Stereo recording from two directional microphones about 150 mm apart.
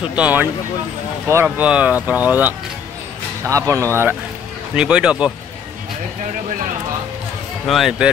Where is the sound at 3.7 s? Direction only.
20° right (ahead or behind).